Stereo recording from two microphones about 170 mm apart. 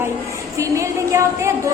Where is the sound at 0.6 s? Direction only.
20° right (ahead or behind).